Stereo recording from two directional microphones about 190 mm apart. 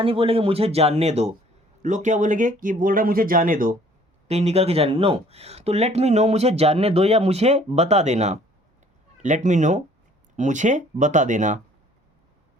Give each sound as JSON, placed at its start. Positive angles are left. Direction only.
{"t": 0.0, "sound": "speech", "side_deg": -30}
{"t": 4.3, "sound": "speech", "side_deg": -35}